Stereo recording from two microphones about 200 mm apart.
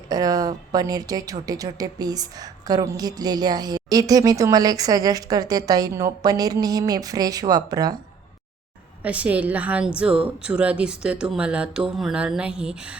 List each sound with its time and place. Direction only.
0.1 s a woman's voice: 20° right (ahead or behind)
9.0 s a woman's voice: 5° right (ahead or behind)